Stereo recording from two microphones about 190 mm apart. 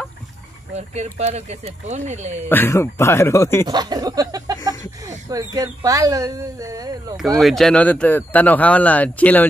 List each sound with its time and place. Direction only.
0.7 s speech: 35° right (ahead or behind)
2.5 s speech: 10° left (ahead or behind)
3.6 s speech: 20° right (ahead or behind)
7.3 s speech: centre (ahead or behind)